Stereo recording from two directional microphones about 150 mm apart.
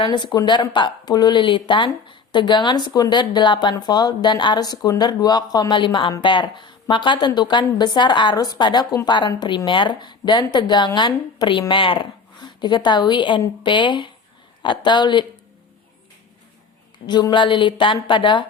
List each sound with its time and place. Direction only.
0.0 s speech: 30° left (ahead or behind)
17.1 s speech: 30° left (ahead or behind)